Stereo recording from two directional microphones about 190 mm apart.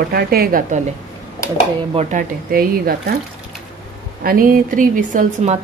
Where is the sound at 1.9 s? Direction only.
45° right (ahead or behind).